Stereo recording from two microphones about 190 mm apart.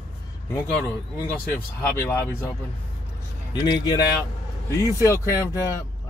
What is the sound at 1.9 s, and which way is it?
Speech, 10° left (ahead or behind).